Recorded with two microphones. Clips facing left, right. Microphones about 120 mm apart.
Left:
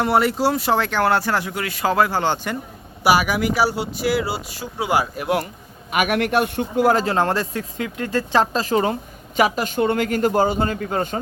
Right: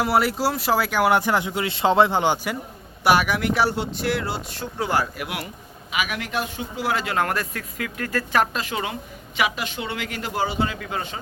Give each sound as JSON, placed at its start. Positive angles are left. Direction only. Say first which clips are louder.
{"t": 0.0, "sound": "speech", "louder": "left 3 dB", "side_deg": 0}
{"t": 3.0, "sound": "speech", "louder": "left 2 dB", "side_deg": 5}
{"t": 5.1, "sound": "a man's voice", "louder": "left 9 dB", "side_deg": 35}
{"t": 5.9, "sound": "speech", "louder": "left 8 dB", "side_deg": 55}